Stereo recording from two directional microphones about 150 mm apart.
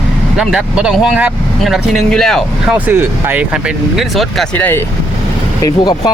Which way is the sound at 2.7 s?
15° right (ahead or behind).